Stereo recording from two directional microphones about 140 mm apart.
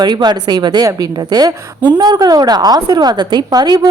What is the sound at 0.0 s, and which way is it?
A woman's voice, 30° right (ahead or behind).